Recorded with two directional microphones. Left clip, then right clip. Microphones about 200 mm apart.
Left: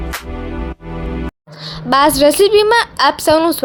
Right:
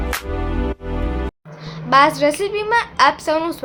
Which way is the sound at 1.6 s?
40° left (ahead or behind).